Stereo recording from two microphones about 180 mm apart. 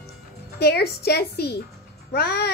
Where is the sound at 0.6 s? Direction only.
65° left (ahead or behind).